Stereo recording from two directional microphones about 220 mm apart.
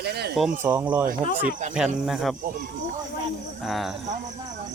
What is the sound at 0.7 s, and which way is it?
Speech, 10° right (ahead or behind).